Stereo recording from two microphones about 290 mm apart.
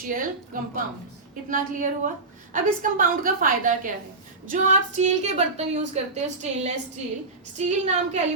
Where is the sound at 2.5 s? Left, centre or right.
Right.